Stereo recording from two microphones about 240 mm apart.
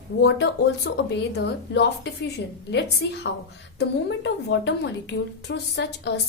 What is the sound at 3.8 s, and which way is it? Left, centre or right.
A woman's voice, left.